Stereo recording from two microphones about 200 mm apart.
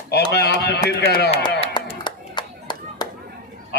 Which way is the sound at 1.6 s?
20° left (ahead or behind).